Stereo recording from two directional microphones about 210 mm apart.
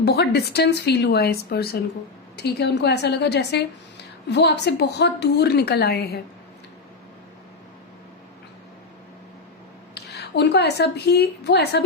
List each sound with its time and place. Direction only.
0.0 s a woman's voice: 50° left (ahead or behind)
9.9 s a woman's voice: 50° left (ahead or behind)